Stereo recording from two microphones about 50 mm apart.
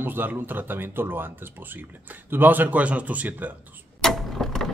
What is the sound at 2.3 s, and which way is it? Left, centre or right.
Speech, right.